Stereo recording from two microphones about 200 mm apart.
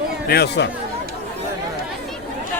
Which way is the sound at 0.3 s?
55° left (ahead or behind).